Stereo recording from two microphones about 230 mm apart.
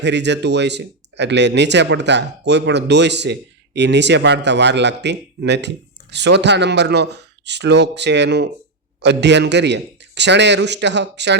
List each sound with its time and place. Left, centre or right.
0.0 s speech: right